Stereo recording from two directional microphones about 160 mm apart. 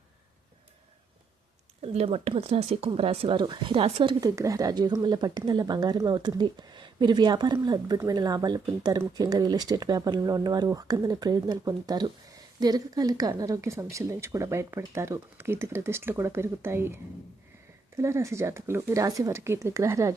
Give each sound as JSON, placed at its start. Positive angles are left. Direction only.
{"t": 1.8, "sound": "speech", "side_deg": -40}
{"t": 4.2, "sound": "speech", "side_deg": -20}